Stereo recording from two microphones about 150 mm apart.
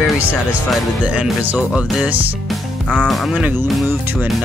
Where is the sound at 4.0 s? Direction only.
15° right (ahead or behind).